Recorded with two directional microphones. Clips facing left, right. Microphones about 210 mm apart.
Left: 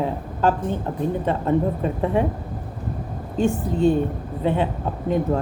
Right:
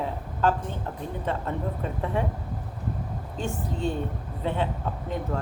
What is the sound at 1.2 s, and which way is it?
Speech, 15° left (ahead or behind).